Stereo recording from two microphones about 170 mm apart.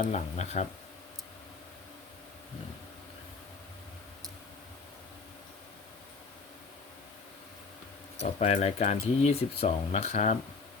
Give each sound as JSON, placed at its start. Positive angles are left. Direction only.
{"t": 0.0, "sound": "speech", "side_deg": 40}
{"t": 8.4, "sound": "speech", "side_deg": 40}